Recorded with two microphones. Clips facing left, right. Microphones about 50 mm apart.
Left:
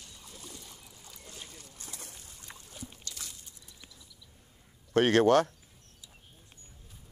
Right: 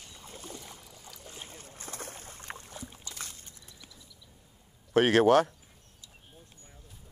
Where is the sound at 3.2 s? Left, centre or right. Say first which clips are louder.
Right 3 dB; right.